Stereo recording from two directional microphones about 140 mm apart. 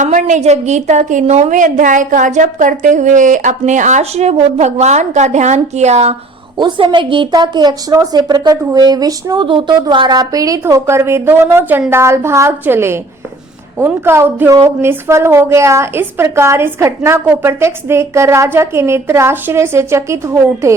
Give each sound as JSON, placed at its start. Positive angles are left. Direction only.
{"t": 0.0, "sound": "a woman's voice", "side_deg": -60}
{"t": 6.6, "sound": "a woman's voice", "side_deg": -35}